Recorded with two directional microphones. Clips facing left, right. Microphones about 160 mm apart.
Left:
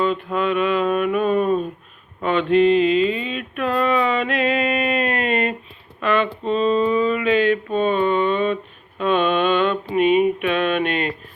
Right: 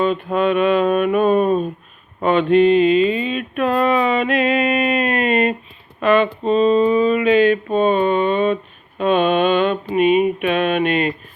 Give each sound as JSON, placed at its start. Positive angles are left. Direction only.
{"t": 0.3, "sound": "mantra", "side_deg": -25}
{"t": 2.2, "sound": "a sound", "side_deg": -20}
{"t": 6.0, "sound": "mantra", "side_deg": -15}